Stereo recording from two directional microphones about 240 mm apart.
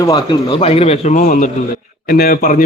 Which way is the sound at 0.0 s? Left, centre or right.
Centre.